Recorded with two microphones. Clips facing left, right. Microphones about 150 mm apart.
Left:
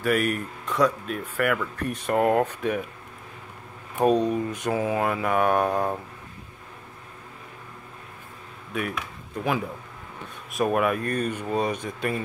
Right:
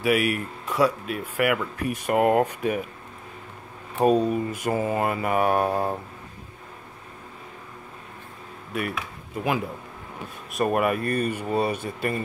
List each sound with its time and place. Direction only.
0.0 s speech: 10° right (ahead or behind)
4.0 s mantra: 5° right (ahead or behind)
8.7 s speech: 5° right (ahead or behind)